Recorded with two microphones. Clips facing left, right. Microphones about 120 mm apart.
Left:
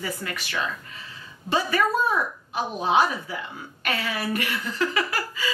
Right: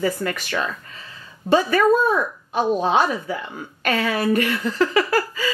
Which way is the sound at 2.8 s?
45° right (ahead or behind).